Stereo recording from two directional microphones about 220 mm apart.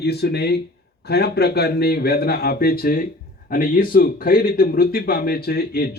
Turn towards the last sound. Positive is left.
turn(degrees=45)  # may be behind; listen again after turning